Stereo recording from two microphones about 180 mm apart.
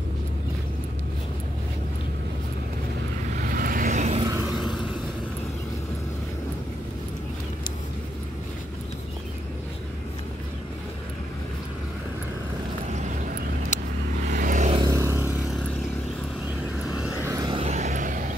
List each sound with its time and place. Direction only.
3.3 s vehicle: 50° right (ahead or behind)
4.2 s vehicle: 20° right (ahead or behind)
14.2 s vehicle: 45° right (ahead or behind)
14.9 s vehicle: 15° right (ahead or behind)
17.0 s vehicle: 15° right (ahead or behind)
17.6 s vehicle: 40° right (ahead or behind)